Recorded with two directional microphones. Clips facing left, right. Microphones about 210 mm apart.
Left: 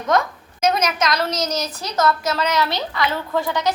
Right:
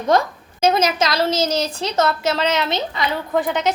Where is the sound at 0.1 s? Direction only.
30° right (ahead or behind).